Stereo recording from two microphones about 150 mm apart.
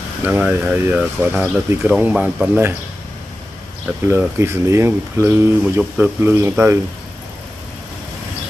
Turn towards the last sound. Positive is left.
turn(degrees=-15)  # may be behind; listen again after turning